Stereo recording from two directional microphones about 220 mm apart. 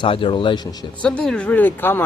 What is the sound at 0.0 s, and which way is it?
Speech, 25° left (ahead or behind).